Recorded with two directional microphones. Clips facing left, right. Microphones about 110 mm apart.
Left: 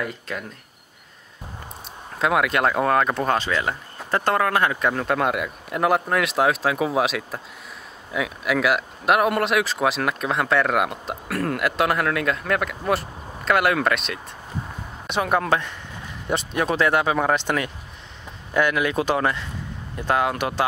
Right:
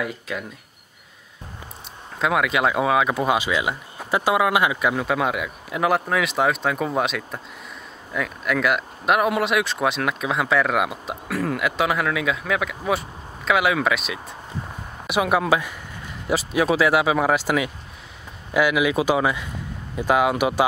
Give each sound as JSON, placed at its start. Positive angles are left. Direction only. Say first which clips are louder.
{"t": 0.0, "sound": "speech", "louder": "right 1 dB", "side_deg": 0}
{"t": 2.1, "sound": "speech", "louder": "left 1 dB", "side_deg": 0}